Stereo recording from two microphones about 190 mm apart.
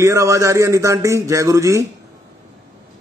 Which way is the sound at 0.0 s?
15° right (ahead or behind).